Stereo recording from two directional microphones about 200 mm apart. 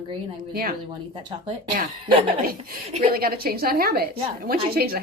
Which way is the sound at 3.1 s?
45° right (ahead or behind).